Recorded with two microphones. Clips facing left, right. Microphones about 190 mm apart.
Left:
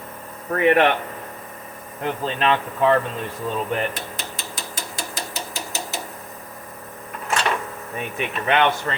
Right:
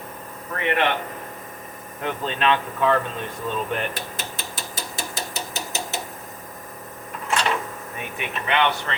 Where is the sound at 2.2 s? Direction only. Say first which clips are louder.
Left 1 dB; 35° left (ahead or behind).